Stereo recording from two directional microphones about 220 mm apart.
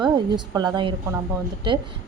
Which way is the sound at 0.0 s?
20° right (ahead or behind).